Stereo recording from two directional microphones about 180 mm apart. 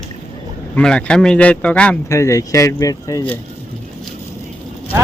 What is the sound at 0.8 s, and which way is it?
Speech, 5° left (ahead or behind).